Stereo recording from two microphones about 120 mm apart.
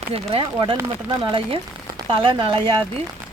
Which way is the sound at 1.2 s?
45° right (ahead or behind).